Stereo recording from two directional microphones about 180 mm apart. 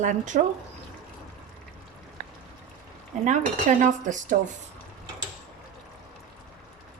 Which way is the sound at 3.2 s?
40° right (ahead or behind).